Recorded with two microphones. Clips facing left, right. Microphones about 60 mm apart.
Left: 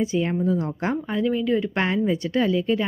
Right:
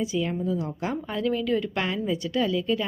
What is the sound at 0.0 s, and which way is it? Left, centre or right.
Speech, left.